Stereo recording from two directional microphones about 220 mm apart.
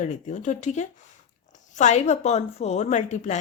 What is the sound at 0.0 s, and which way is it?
Speech, 35° left (ahead or behind).